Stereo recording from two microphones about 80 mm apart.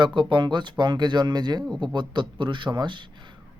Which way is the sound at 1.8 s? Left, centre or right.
Right.